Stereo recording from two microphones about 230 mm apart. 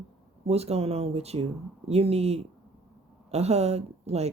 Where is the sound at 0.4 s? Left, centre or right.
Right.